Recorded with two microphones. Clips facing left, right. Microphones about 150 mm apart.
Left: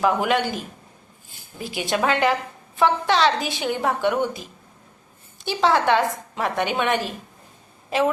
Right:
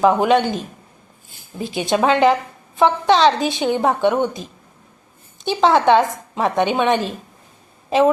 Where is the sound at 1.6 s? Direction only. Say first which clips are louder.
Right 5 dB; 25° right (ahead or behind).